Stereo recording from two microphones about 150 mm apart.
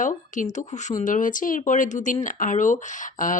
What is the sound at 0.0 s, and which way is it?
Speech, 60° left (ahead or behind).